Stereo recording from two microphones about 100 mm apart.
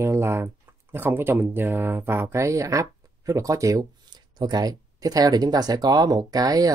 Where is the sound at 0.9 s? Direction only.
20° right (ahead or behind).